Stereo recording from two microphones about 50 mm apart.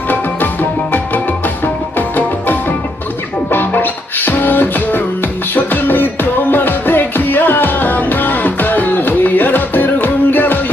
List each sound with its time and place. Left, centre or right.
0.1 s music: left